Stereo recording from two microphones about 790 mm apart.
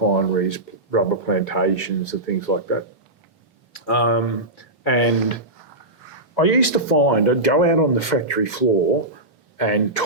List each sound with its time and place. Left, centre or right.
0.2 s speech: left
3.7 s speech: left
6.3 s speech: left